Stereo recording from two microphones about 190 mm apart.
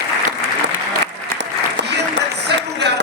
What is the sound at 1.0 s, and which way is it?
Applause, 65° right (ahead or behind).